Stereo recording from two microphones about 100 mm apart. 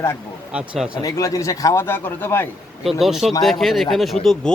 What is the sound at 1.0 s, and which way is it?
Speech, 35° left (ahead or behind).